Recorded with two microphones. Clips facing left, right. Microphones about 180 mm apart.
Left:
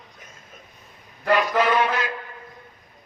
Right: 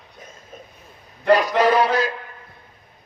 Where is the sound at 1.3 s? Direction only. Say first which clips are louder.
Right 4 dB; 35° right (ahead or behind).